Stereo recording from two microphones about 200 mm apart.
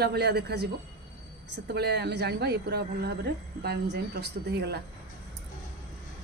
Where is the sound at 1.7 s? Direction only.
55° right (ahead or behind).